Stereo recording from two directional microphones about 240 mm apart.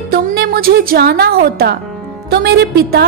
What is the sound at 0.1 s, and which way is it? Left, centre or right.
A woman's voice, right.